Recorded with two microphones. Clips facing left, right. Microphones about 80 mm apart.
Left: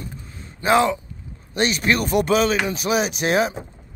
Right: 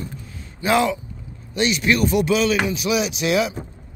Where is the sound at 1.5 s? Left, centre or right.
Left.